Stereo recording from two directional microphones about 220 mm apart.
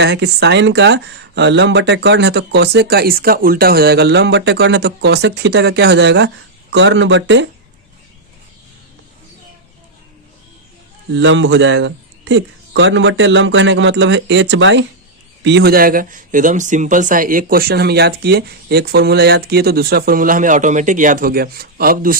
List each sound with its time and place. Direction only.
0.0 s speech: 50° right (ahead or behind)
11.1 s speech: 55° right (ahead or behind); by 22.2 s 40° right (ahead or behind)